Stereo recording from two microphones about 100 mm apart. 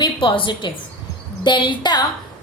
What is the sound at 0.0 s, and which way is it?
A woman's voice, 55° left (ahead or behind).